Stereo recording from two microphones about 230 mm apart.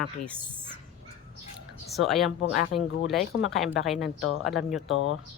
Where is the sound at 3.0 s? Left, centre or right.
Centre.